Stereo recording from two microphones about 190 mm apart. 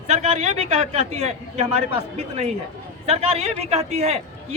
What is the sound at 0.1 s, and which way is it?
A man's voice, 35° right (ahead or behind).